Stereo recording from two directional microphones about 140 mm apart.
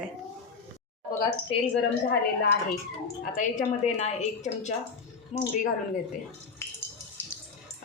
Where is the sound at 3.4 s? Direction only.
60° left (ahead or behind).